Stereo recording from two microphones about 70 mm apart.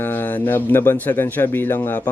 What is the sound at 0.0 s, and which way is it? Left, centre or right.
A man's voice, left.